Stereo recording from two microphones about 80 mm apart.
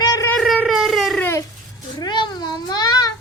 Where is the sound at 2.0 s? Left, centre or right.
Left.